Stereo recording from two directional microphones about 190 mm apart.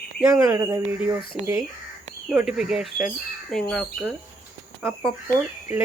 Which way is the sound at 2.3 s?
5° right (ahead or behind).